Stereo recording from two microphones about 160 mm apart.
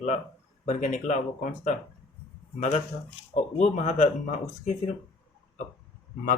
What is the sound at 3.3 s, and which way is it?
Speech, 45° left (ahead or behind).